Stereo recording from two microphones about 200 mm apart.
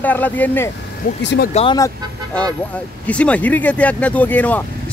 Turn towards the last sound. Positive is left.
turn(degrees=10)  # may be behind; listen again after turning